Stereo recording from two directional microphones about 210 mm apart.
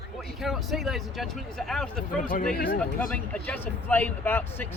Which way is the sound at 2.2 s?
40° left (ahead or behind).